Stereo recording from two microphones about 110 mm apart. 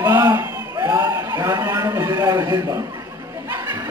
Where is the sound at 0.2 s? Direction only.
35° right (ahead or behind).